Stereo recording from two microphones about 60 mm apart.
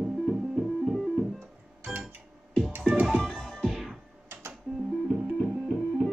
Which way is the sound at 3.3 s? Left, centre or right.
Centre.